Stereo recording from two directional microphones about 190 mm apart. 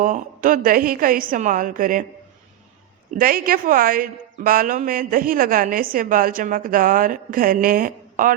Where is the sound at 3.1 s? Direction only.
50° right (ahead or behind).